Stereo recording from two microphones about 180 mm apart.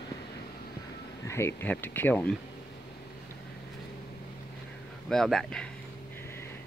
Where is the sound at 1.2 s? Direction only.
15° left (ahead or behind).